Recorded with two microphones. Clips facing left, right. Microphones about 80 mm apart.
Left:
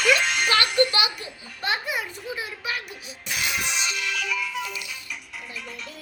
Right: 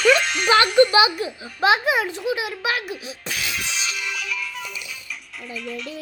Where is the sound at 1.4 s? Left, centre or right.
Right.